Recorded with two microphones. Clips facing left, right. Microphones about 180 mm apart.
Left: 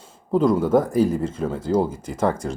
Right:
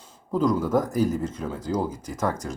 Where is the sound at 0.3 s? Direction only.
25° left (ahead or behind).